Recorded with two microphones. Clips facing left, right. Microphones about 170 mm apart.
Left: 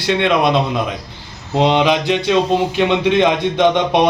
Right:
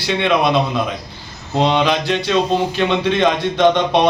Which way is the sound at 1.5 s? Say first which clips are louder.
Left 2 dB; 15° left (ahead or behind).